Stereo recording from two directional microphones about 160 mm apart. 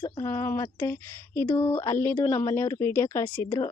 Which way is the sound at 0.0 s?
20° left (ahead or behind).